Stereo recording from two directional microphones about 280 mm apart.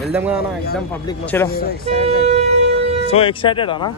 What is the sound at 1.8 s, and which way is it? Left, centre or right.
Vehicle, right.